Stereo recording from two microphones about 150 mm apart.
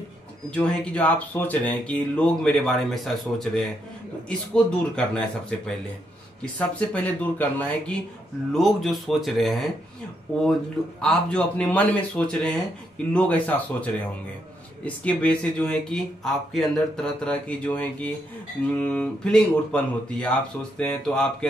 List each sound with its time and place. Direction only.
0.6 s speech: 10° left (ahead or behind)
6.4 s speech: 10° left (ahead or behind)
8.5 s speech: centre (ahead or behind)
11.0 s speech: 5° left (ahead or behind)